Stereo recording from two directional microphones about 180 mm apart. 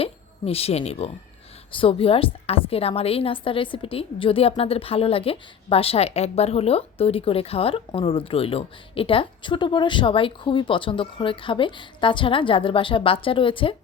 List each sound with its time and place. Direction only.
0.0 s a woman's voice: 35° left (ahead or behind)